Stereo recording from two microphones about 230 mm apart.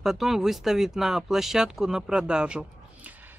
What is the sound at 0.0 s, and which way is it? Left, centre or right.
Speech, centre.